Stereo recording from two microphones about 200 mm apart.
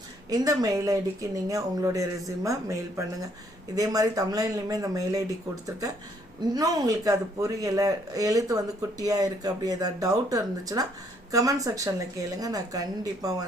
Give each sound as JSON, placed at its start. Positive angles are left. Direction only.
{"t": 0.3, "sound": "a man's voice", "side_deg": -20}
{"t": 6.5, "sound": "a man's voice", "side_deg": -20}